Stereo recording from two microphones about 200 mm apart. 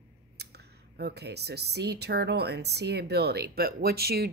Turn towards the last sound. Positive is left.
turn(degrees=-50)  # may be behind; listen again after turning